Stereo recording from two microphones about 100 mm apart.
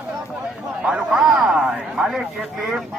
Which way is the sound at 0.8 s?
10° right (ahead or behind).